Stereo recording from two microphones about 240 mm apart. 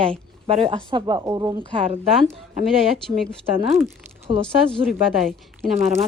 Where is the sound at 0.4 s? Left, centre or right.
Right.